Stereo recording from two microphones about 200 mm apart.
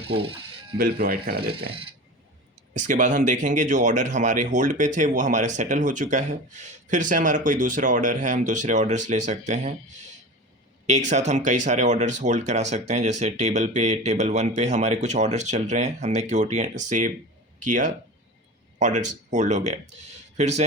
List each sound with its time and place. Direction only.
0.0 s speech: 25° right (ahead or behind)
0.8 s speech: 50° right (ahead or behind)
2.7 s speech: 40° right (ahead or behind)
10.8 s a man's voice: 35° right (ahead or behind)